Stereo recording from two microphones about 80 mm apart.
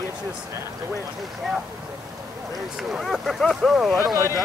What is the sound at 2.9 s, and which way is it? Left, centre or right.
Speech, centre.